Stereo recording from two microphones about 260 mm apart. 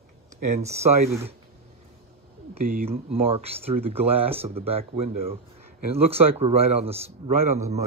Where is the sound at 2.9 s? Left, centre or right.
Right.